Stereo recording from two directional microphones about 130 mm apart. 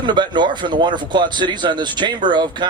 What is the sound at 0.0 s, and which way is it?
Speech, 35° right (ahead or behind).